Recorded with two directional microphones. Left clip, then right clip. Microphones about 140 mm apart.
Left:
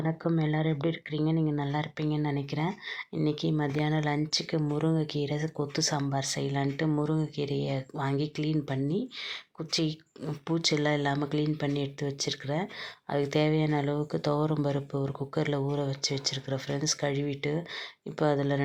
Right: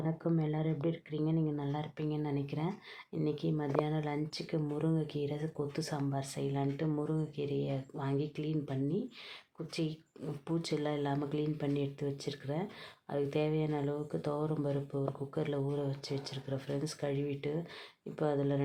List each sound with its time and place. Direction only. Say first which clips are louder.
0.0 s speech: left 5 dB; 20° left (ahead or behind)